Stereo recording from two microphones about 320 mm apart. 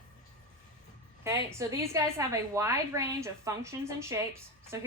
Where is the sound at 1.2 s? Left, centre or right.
Centre.